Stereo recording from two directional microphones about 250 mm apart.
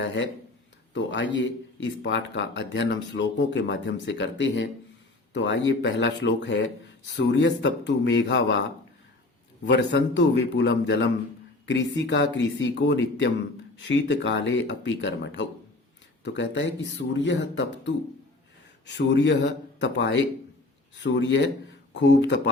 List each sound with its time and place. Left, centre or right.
0.9 s speech: left
9.6 s speech: left